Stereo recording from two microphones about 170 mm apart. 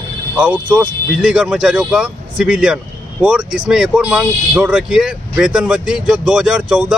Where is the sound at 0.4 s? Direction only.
5° right (ahead or behind).